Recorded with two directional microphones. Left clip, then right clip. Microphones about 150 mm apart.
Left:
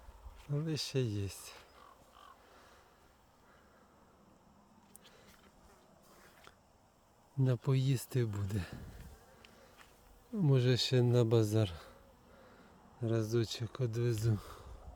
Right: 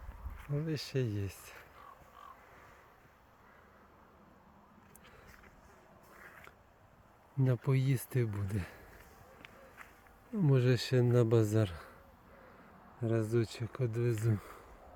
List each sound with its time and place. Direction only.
0.4 s speech: 20° left (ahead or behind)
7.3 s speech: centre (ahead or behind)
10.3 s speech: centre (ahead or behind)
13.0 s speech: centre (ahead or behind)